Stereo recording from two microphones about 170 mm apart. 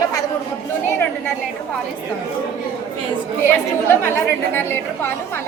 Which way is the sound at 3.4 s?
15° left (ahead or behind).